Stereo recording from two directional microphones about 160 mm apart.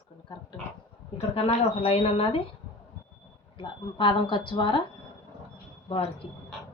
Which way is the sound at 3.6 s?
30° left (ahead or behind).